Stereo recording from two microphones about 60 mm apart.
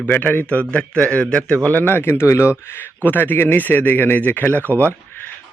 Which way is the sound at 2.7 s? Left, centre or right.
Left.